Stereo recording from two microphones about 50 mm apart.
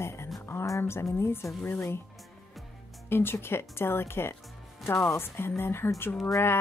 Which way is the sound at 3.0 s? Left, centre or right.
Left.